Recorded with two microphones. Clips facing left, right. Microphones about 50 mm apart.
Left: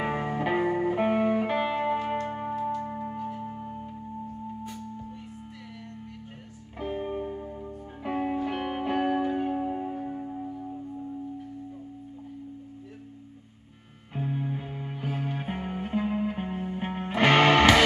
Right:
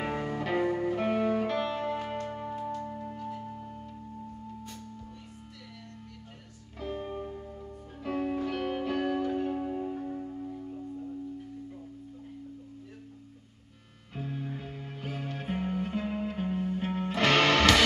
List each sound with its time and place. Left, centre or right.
0.0 s music: left
6.8 s music: left
14.1 s music: left